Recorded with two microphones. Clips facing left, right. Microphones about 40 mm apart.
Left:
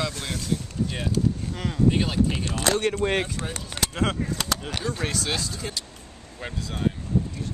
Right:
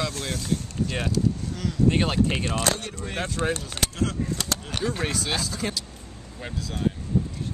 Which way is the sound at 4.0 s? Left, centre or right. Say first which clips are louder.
Left 3 dB; left.